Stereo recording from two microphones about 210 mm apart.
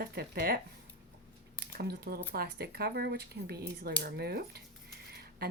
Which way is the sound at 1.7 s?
45° right (ahead or behind).